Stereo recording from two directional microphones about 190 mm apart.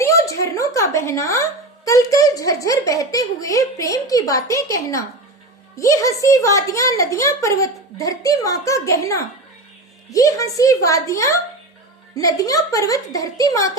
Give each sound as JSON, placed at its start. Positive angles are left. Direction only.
{"t": 0.0, "sound": "a woman's voice", "side_deg": 15}